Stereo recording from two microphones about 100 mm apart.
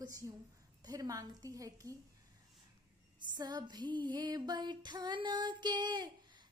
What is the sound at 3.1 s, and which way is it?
Child singing, 45° right (ahead or behind).